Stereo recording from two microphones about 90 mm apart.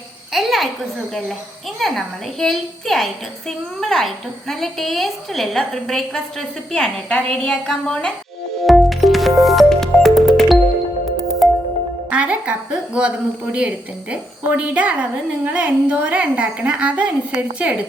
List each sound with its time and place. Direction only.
0.3 s a woman's voice: centre (ahead or behind)
1.8 s a woman's voice: 5° left (ahead or behind)
8.6 s music: centre (ahead or behind)
12.1 s a woman's voice: 15° right (ahead or behind)